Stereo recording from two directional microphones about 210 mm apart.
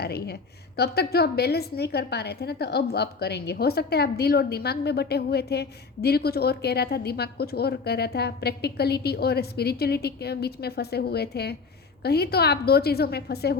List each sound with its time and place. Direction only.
0.0 s a woman's voice: 50° left (ahead or behind)